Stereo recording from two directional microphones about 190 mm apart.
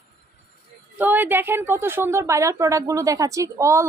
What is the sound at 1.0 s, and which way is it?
A woman's voice, 10° right (ahead or behind).